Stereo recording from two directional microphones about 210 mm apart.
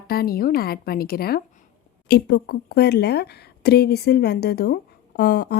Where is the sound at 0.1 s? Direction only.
45° left (ahead or behind).